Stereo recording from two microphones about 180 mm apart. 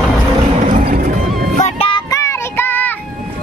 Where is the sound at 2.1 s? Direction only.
15° left (ahead or behind).